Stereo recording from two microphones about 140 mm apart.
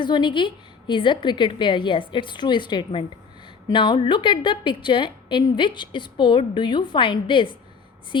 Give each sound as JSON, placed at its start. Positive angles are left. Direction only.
{"t": 0.0, "sound": "a woman's voice", "side_deg": 35}